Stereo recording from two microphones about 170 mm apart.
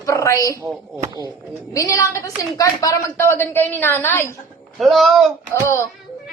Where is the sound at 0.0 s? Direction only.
20° left (ahead or behind).